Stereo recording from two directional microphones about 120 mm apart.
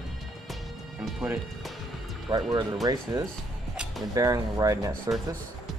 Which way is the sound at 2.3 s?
35° right (ahead or behind).